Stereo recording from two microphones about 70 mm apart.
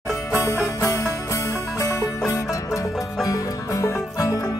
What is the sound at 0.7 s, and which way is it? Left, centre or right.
Music, left.